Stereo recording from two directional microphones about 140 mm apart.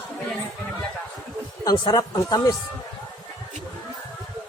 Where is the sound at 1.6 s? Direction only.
25° left (ahead or behind).